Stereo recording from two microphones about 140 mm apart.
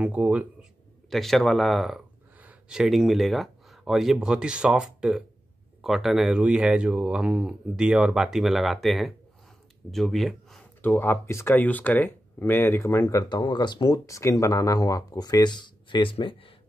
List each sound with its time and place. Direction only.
0.0 s speech: 10° right (ahead or behind)
1.1 s speech: centre (ahead or behind)
10.8 s speech: 15° left (ahead or behind); by 16.5 s 40° left (ahead or behind)